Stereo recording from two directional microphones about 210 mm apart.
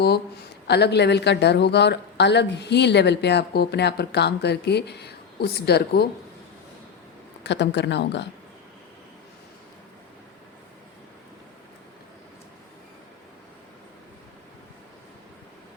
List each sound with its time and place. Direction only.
0.7 s speech: 55° left (ahead or behind)
7.4 s speech: 55° left (ahead or behind)